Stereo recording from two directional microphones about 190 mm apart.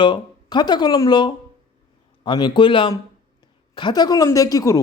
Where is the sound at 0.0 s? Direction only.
25° left (ahead or behind).